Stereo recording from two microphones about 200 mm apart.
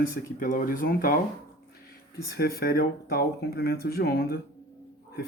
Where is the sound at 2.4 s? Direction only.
50° left (ahead or behind).